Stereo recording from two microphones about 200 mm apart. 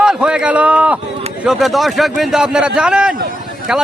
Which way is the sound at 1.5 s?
Centre (ahead or behind).